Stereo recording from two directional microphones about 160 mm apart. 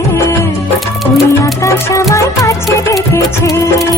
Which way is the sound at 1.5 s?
20° left (ahead or behind).